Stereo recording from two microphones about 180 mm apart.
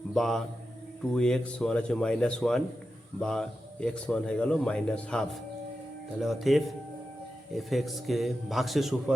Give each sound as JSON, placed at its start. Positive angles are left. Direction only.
{"t": 0.1, "sound": "a man's voice", "side_deg": 0}